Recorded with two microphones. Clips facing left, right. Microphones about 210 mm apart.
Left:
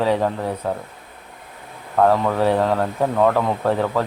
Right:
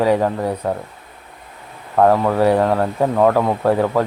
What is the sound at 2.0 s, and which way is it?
Speech, 10° right (ahead or behind).